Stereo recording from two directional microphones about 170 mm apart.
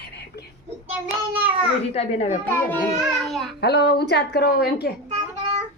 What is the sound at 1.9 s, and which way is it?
Speech, 40° left (ahead or behind).